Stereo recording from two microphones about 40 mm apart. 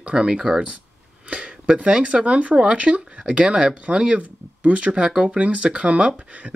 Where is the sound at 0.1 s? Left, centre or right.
Centre.